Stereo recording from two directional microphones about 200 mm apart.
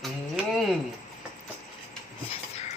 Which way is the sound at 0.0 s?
Centre (ahead or behind).